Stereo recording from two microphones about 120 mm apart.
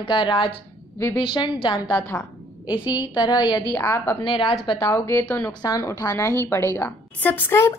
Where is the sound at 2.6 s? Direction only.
10° right (ahead or behind).